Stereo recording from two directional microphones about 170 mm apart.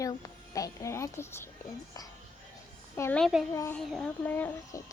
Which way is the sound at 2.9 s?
15° left (ahead or behind).